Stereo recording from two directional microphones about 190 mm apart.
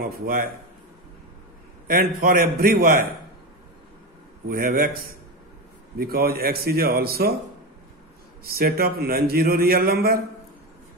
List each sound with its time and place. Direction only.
0.0 s speech: 50° right (ahead or behind)
1.9 s speech: 50° right (ahead or behind)
4.5 s speech: 50° right (ahead or behind)
8.5 s speech: 55° right (ahead or behind)